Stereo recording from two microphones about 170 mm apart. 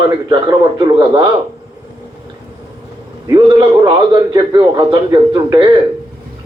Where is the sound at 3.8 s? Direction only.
25° right (ahead or behind).